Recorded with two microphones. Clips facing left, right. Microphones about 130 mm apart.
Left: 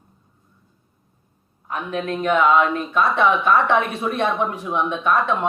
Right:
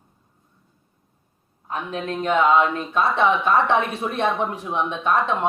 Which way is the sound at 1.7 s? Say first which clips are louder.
Left 2 dB; 25° right (ahead or behind).